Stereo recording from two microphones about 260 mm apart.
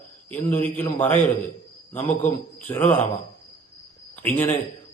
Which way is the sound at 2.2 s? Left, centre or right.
Centre.